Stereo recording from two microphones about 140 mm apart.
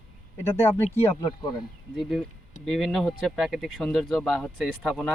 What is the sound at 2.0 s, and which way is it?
Speech, centre (ahead or behind).